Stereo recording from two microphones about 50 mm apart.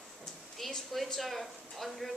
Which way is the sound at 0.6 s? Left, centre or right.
Centre.